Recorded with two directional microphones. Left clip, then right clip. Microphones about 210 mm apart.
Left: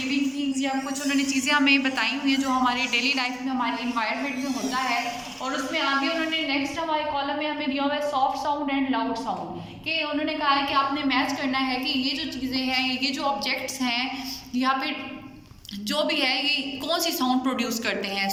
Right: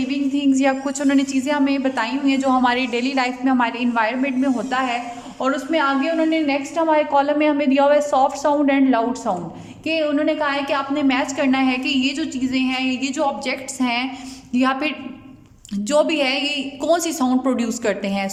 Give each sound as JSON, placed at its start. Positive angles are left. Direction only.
{"t": 0.1, "sound": "a woman's voice", "side_deg": -55}
{"t": 5.4, "sound": "a woman's voice", "side_deg": -60}